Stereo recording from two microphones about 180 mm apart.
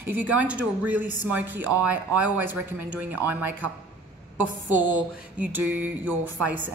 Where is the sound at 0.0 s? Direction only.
10° right (ahead or behind).